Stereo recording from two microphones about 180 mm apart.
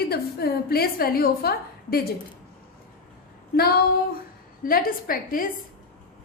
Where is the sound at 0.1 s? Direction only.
60° left (ahead or behind).